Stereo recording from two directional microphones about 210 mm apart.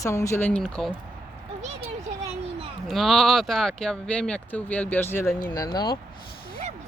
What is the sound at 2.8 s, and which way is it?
Speech, centre (ahead or behind).